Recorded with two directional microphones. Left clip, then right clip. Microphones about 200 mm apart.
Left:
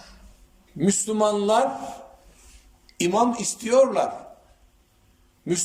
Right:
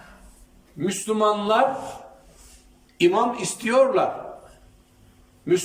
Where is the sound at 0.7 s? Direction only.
30° left (ahead or behind).